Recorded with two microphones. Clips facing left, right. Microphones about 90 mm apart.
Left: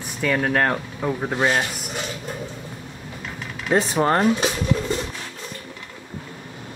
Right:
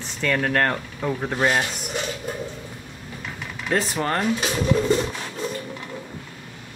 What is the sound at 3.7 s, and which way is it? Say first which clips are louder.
Speech: left 5 dB; 25° left (ahead or behind).